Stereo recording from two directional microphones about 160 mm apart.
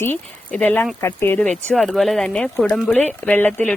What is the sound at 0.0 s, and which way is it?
Speech, 10° left (ahead or behind).